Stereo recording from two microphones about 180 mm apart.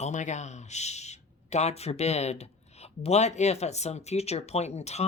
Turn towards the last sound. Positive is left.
turn(degrees=35)  # may be behind; listen again after turning